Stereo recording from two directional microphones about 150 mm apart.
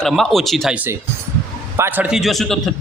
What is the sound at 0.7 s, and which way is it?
A man's voice, 15° right (ahead or behind).